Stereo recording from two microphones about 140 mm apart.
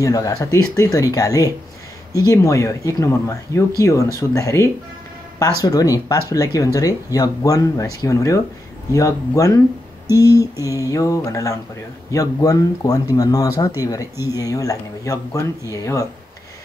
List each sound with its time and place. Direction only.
0.0 s speech: 25° left (ahead or behind)